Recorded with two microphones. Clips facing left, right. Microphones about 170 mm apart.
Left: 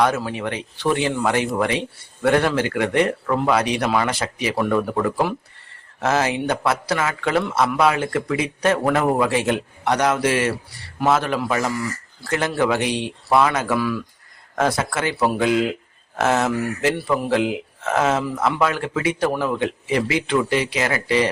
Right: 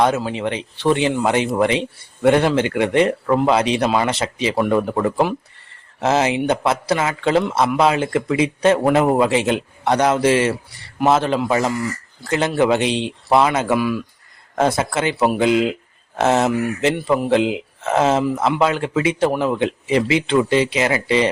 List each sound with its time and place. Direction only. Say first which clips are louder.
0.0 s speech: right 2 dB; 20° right (ahead or behind)